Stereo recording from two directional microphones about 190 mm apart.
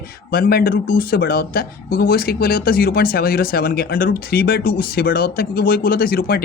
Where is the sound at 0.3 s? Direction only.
50° left (ahead or behind).